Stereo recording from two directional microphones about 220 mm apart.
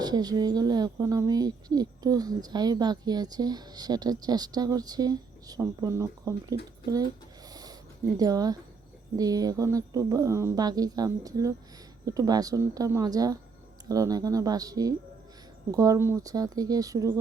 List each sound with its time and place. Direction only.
0.0 s speech: 20° right (ahead or behind)
7.5 s a sound: 20° right (ahead or behind)
8.2 s speech: 15° right (ahead or behind)